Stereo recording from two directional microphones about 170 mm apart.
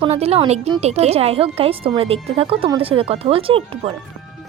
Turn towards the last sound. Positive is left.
turn(degrees=-35)  # may be behind; listen again after turning